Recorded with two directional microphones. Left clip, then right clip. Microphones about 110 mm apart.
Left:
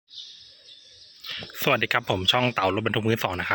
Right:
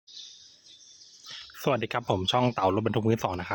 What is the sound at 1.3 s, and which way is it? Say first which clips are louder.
Speech: left 4 dB; 20° right (ahead or behind).